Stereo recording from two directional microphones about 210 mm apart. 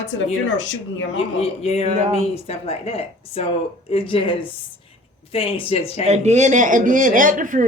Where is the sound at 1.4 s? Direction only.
30° left (ahead or behind).